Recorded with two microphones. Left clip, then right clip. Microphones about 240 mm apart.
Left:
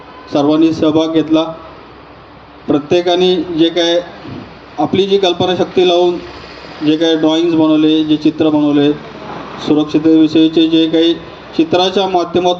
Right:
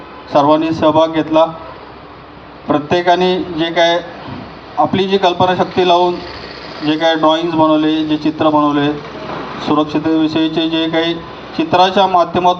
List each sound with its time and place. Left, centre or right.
0.3 s a man's voice: left
2.7 s a man's voice: left